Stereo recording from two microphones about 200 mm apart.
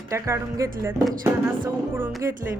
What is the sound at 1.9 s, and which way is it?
Speech, 15° right (ahead or behind).